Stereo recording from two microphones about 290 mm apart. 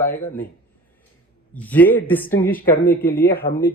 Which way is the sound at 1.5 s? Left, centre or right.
Centre.